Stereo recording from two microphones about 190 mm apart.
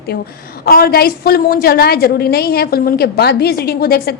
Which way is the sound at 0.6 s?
50° left (ahead or behind).